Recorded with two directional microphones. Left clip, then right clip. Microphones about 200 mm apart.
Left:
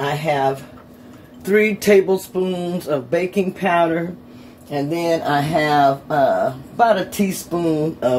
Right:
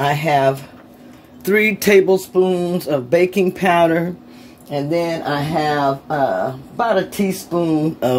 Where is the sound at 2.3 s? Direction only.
40° right (ahead or behind).